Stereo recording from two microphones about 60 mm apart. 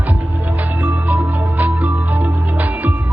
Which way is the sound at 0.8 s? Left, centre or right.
Right.